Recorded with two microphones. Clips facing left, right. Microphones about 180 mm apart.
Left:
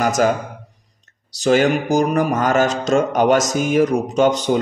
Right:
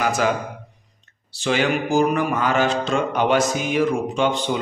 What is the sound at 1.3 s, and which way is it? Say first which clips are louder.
A man's voice: left 6 dB; 40° left (ahead or behind).